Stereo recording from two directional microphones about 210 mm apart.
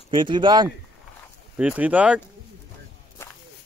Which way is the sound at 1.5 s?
5° right (ahead or behind).